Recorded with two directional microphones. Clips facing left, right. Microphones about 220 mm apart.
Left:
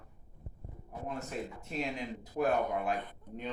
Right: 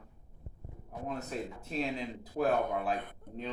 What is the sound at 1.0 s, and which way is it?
Speech, 40° right (ahead or behind).